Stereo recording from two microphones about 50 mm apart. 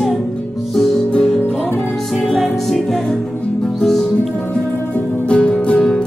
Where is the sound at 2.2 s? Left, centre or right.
Centre.